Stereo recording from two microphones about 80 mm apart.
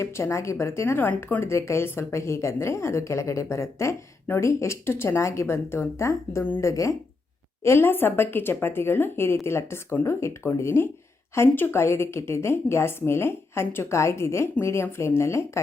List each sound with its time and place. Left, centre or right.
0.0 s a woman's voice: left
1.5 s a woman's voice: left